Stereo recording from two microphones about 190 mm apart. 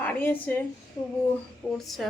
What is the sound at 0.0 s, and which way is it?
Speech, 10° left (ahead or behind).